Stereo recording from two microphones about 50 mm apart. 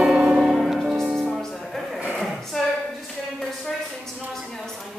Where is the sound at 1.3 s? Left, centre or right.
Centre.